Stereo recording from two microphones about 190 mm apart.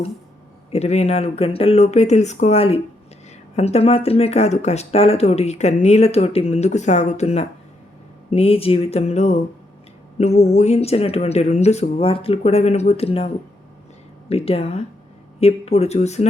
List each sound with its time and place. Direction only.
0.7 s speech: 35° left (ahead or behind)